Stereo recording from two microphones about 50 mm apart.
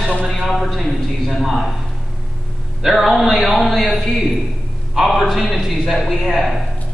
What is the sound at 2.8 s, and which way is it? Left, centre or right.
A man's voice, centre.